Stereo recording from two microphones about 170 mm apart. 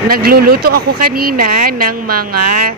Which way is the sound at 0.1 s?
60° right (ahead or behind).